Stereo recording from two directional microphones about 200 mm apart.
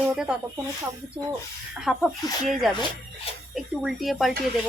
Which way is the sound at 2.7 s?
20° left (ahead or behind).